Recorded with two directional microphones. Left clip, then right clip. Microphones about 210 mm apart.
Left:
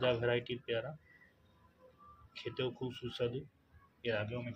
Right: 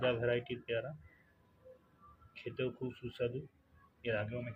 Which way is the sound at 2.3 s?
15° left (ahead or behind).